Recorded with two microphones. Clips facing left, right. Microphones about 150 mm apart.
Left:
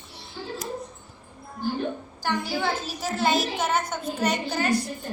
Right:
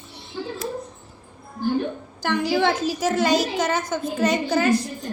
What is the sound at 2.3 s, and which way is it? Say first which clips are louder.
A woman's voice: right 6 dB; 85° right.